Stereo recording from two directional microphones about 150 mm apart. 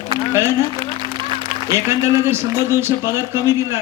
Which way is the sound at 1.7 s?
20° right (ahead or behind).